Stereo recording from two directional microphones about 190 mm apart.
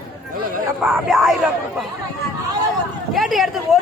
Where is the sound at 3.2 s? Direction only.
Centre (ahead or behind).